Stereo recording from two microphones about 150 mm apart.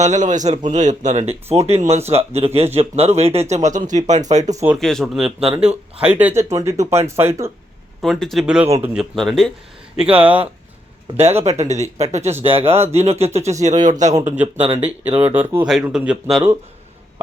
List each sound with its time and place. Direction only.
0.0 s speech: 55° right (ahead or behind)
4.5 s speech: 10° right (ahead or behind)
4.8 s speech: 5° left (ahead or behind); by 7.5 s 15° right (ahead or behind)
8.0 s speech: centre (ahead or behind)
9.1 s speech: centre (ahead or behind)
10.0 s speech: 10° right (ahead or behind)
11.4 s speech: 50° right (ahead or behind)
14.5 s speech: 40° right (ahead or behind)
15.2 s speech: 15° right (ahead or behind)